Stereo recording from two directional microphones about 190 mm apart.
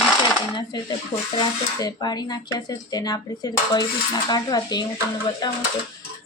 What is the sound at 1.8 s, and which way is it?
Speech, 20° left (ahead or behind).